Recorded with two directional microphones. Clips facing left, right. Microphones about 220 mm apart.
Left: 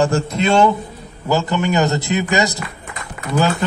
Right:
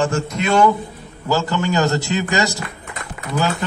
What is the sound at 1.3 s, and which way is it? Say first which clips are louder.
A man's voice: left 2 dB; 20° left (ahead or behind).